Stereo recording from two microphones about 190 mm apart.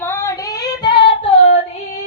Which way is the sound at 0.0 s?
15° left (ahead or behind).